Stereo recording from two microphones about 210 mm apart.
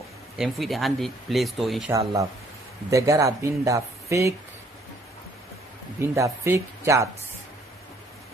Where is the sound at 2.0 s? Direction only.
20° right (ahead or behind).